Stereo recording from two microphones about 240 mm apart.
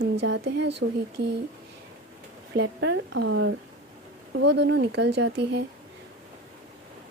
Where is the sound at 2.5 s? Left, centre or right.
Right.